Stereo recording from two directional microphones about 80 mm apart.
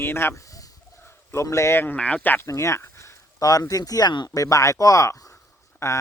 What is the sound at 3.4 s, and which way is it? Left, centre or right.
Speech, left.